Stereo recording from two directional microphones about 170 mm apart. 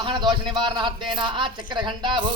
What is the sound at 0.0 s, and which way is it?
A man's voice, 25° right (ahead or behind).